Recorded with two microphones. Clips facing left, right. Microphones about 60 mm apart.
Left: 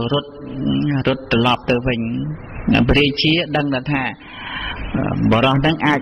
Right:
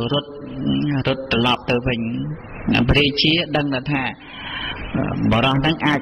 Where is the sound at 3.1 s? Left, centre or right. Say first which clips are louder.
Left 2 dB; left.